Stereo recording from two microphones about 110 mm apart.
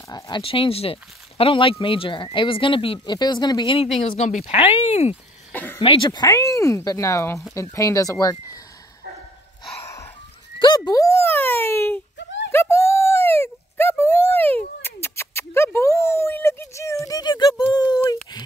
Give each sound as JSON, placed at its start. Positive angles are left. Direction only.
{"t": 0.4, "sound": "speech", "side_deg": 55}
{"t": 3.2, "sound": "speech", "side_deg": 40}
{"t": 4.5, "sound": "speech", "side_deg": 70}
{"t": 5.5, "sound": "cricket", "side_deg": 15}
{"t": 5.8, "sound": "speech", "side_deg": 50}
{"t": 6.2, "sound": "speech", "side_deg": 30}
{"t": 10.9, "sound": "a sound", "side_deg": 30}